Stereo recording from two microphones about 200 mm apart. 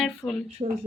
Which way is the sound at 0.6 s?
20° right (ahead or behind).